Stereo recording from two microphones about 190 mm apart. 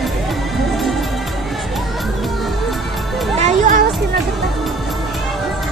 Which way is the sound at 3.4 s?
40° right (ahead or behind).